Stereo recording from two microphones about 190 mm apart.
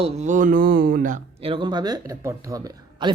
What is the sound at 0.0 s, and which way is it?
Speech, 40° right (ahead or behind).